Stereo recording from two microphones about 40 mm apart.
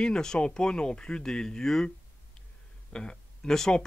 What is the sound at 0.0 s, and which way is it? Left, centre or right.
Speech, centre.